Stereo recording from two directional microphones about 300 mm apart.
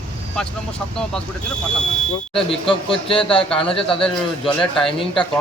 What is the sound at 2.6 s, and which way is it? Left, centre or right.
Speech, centre.